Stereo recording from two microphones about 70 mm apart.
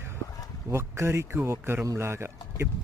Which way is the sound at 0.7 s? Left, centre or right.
Right.